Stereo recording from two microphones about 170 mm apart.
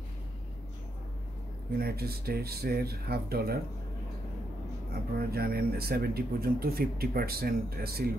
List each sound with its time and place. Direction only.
1.8 s speech: 65° right (ahead or behind)
4.9 s speech: 65° right (ahead or behind)